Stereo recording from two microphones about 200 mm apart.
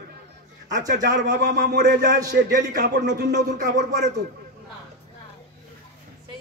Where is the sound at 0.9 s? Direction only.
55° right (ahead or behind).